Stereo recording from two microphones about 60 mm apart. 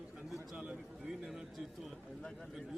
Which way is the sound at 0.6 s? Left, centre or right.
Centre.